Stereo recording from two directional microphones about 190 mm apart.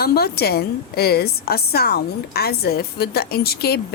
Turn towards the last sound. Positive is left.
turn(degrees=55)  # may be behind; listen again after turning